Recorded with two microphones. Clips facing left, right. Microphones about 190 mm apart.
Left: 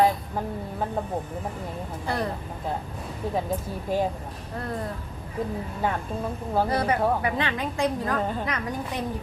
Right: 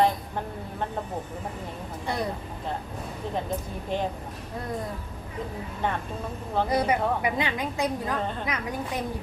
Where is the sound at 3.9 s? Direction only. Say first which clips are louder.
Left 4 dB; 5° left (ahead or behind).